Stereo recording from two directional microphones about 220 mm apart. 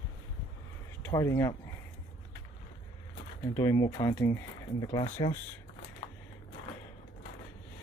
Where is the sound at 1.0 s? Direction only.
15° left (ahead or behind).